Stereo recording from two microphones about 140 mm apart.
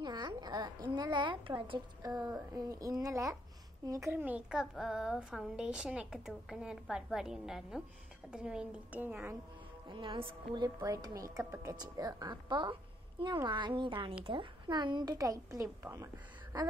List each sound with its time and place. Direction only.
0.0 s a woman's voice: 30° right (ahead or behind)
9.8 s a woman's voice: 35° right (ahead or behind)